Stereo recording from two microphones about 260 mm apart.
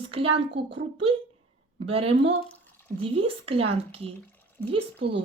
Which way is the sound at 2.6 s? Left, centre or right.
Centre.